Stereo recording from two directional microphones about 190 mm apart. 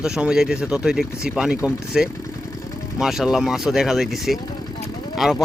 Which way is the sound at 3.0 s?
Centre (ahead or behind).